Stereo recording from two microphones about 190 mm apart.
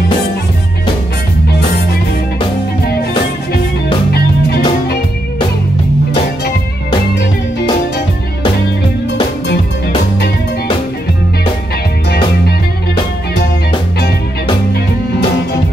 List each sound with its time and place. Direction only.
4.1 s music: 55° left (ahead or behind)